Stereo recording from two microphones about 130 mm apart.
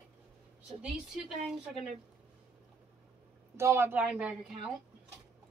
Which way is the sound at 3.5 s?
20° right (ahead or behind).